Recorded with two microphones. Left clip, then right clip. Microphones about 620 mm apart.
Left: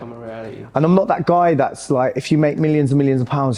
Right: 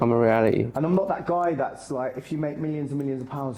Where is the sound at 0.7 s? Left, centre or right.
Left.